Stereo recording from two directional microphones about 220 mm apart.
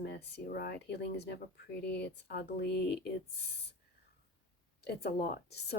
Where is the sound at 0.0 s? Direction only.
50° left (ahead or behind).